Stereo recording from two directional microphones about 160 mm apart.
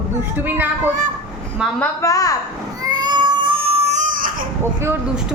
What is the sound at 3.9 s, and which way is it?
Baby cry, 55° right (ahead or behind).